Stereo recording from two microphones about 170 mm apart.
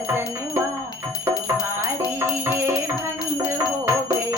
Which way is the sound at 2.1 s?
15° right (ahead or behind).